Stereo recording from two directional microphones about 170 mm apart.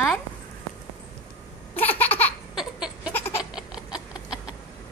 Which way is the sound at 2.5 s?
5° right (ahead or behind).